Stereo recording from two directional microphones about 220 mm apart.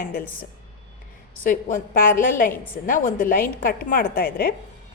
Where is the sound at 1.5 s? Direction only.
40° left (ahead or behind).